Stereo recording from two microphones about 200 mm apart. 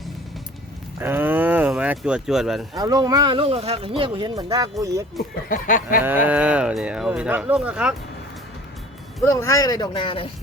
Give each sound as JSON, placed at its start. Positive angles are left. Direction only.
{"t": 0.9, "sound": "a sound", "side_deg": -10}
{"t": 2.7, "sound": "speech", "side_deg": -20}
{"t": 5.5, "sound": "speech", "side_deg": 45}
{"t": 6.1, "sound": "speech", "side_deg": -10}
{"t": 9.2, "sound": "speech", "side_deg": 15}